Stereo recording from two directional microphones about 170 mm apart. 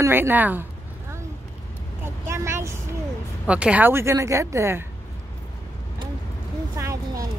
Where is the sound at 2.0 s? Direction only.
15° right (ahead or behind).